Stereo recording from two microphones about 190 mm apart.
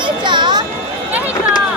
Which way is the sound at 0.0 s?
25° right (ahead or behind).